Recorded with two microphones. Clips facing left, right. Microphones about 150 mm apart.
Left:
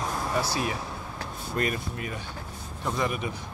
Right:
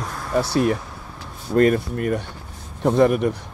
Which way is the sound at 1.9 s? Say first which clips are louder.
Right 12 dB; 70° right (ahead or behind).